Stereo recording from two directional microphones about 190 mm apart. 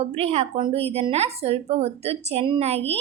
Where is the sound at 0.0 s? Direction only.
35° right (ahead or behind).